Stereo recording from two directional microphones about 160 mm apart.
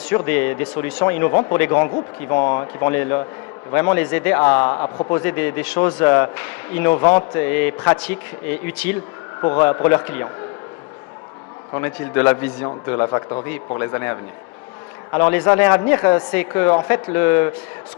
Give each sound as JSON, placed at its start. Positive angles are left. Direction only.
{"t": 0.3, "sound": "a man's voice", "side_deg": 10}
{"t": 4.7, "sound": "a man's voice", "side_deg": 30}
{"t": 5.1, "sound": "a man's voice", "side_deg": 15}
{"t": 9.4, "sound": "a man's voice", "side_deg": 25}
{"t": 9.9, "sound": "a man's voice", "side_deg": 15}
{"t": 11.7, "sound": "a man's voice", "side_deg": 15}
{"t": 12.6, "sound": "a man's voice", "side_deg": 25}